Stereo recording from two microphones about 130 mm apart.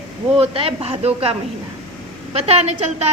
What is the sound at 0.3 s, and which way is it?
A woman's voice, 45° right (ahead or behind).